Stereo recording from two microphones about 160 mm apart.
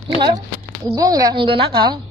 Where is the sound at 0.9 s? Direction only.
25° right (ahead or behind).